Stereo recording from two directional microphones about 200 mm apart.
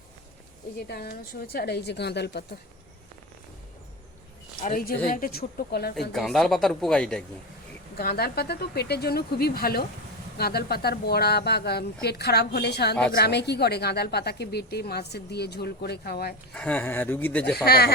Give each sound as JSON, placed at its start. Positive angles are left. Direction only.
{"t": 0.8, "sound": "a woman's voice", "side_deg": 55}
{"t": 4.6, "sound": "a woman's voice", "side_deg": 45}
{"t": 6.1, "sound": "speech", "side_deg": 0}
{"t": 7.9, "sound": "a woman's voice", "side_deg": 50}
{"t": 16.6, "sound": "speech", "side_deg": 10}
{"t": 17.7, "sound": "a woman's voice", "side_deg": 50}